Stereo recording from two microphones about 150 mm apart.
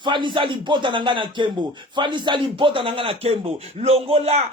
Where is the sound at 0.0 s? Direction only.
30° right (ahead or behind).